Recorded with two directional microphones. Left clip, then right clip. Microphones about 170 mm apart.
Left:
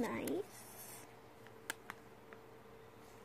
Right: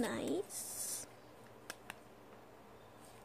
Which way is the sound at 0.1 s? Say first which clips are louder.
Right 2 dB; 15° right (ahead or behind).